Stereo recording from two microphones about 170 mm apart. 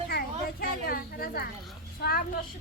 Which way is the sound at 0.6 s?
60° left (ahead or behind).